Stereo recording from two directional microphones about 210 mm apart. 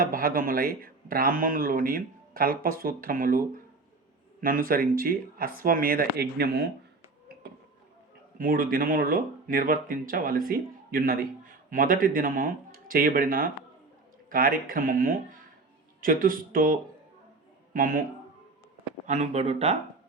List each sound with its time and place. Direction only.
0.0 s speech: 45° right (ahead or behind)
8.4 s speech: 45° right (ahead or behind)
17.7 s speech: 40° right (ahead or behind)
19.0 s speech: 35° right (ahead or behind)